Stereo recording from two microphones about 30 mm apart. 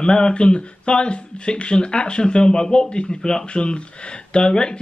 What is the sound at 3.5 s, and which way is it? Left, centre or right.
Speech, left.